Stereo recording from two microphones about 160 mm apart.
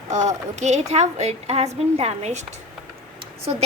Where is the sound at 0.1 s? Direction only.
50° right (ahead or behind).